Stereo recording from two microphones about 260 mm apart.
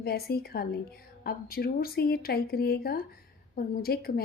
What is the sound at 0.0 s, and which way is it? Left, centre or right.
A woman's voice, left.